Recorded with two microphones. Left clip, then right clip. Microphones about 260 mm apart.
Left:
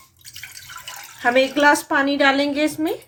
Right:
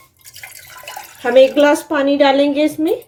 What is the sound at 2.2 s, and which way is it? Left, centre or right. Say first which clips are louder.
Speech: right 6 dB; left.